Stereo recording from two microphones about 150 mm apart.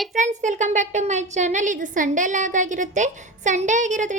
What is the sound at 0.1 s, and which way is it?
A woman's voice, 55° right (ahead or behind).